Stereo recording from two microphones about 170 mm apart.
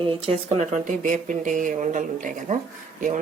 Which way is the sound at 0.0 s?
35° right (ahead or behind).